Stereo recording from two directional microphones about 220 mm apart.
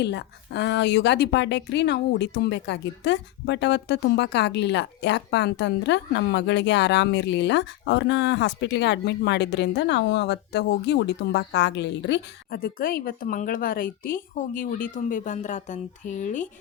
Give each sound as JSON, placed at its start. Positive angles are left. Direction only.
{"t": 0.0, "sound": "a woman's voice", "side_deg": 50}